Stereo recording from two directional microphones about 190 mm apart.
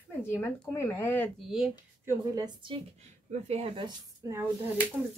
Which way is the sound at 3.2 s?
35° right (ahead or behind).